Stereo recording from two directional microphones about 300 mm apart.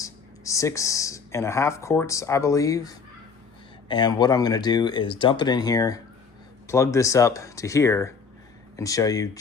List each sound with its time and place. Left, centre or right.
0.0 s speech: centre